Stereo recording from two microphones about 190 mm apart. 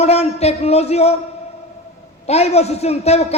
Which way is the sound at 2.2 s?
35° left (ahead or behind).